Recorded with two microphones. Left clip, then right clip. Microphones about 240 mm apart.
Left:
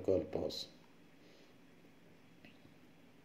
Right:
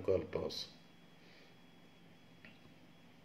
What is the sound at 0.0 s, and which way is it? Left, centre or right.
Speech, left.